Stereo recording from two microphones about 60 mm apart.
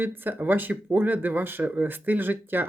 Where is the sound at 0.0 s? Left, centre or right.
Right.